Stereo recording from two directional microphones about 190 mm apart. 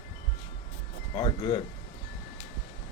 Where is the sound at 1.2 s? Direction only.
35° left (ahead or behind).